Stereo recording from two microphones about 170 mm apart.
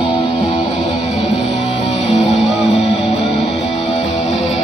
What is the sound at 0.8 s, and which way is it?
Music, 35° left (ahead or behind).